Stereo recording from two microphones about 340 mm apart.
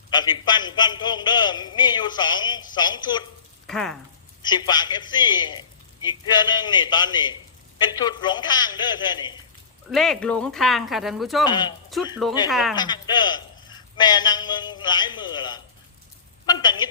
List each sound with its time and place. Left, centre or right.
0.1 s a man's voice: centre
3.7 s speech: centre
4.4 s a man's voice: centre
9.9 s speech: centre
11.4 s a man's voice: centre
11.9 s speech: centre
12.7 s a man's voice: centre